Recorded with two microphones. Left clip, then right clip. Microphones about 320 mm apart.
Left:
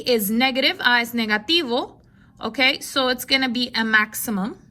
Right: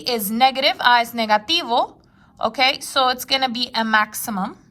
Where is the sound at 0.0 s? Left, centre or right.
Centre.